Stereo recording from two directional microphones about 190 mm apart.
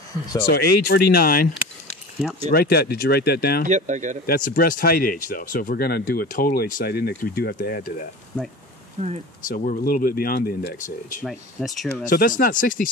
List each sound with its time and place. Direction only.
0.5 s speech: 55° left (ahead or behind)
2.5 s speech: 55° left (ahead or behind)
3.6 s speech: 40° right (ahead or behind)
4.3 s speech: 50° left (ahead or behind)
9.0 s speech: 40° right (ahead or behind)
9.5 s speech: 45° left (ahead or behind)
11.2 s speech: centre (ahead or behind)
12.0 s speech: 45° left (ahead or behind)